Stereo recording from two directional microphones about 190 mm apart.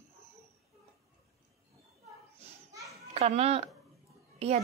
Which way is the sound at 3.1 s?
35° right (ahead or behind).